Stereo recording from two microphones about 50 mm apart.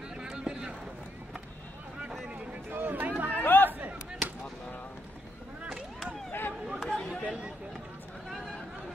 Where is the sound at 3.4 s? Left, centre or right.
Left.